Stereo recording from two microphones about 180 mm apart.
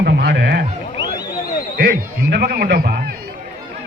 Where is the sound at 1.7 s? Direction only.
60° right (ahead or behind).